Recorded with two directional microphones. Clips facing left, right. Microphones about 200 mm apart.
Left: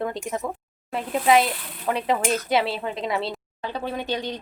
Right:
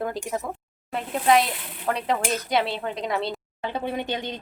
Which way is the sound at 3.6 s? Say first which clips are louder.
Right 1 dB; 20° right (ahead or behind).